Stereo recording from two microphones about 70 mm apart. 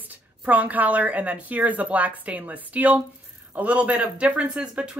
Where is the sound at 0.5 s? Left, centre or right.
Right.